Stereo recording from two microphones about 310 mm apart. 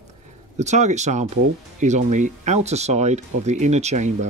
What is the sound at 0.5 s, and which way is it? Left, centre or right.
Speech, right.